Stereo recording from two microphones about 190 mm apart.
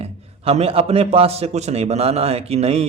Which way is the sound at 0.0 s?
30° right (ahead or behind).